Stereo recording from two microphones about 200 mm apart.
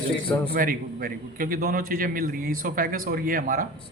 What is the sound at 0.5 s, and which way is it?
Speech, 45° right (ahead or behind).